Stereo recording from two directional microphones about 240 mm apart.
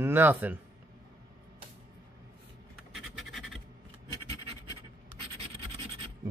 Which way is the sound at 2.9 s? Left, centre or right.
Centre.